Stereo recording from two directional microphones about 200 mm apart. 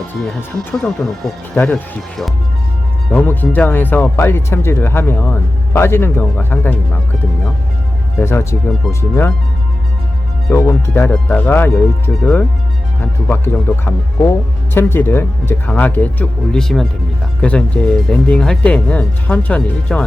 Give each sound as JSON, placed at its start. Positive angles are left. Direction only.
{"t": 0.2, "sound": "speech", "side_deg": 0}
{"t": 8.2, "sound": "speech", "side_deg": 10}
{"t": 10.5, "sound": "speech", "side_deg": 10}